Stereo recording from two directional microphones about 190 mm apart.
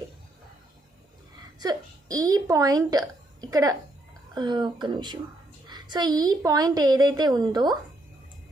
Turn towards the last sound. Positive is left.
turn(degrees=-20)  # may be behind; listen again after turning